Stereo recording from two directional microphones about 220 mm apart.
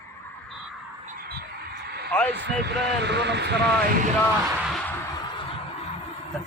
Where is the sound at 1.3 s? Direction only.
45° right (ahead or behind).